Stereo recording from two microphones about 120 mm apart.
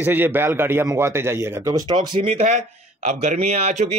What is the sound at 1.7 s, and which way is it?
Speech, 35° right (ahead or behind).